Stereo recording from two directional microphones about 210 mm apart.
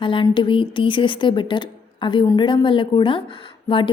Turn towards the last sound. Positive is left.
turn(degrees=25)  # may be behind; listen again after turning